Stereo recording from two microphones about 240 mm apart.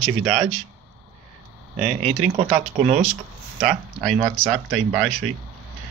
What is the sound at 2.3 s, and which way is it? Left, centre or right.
Speech, right.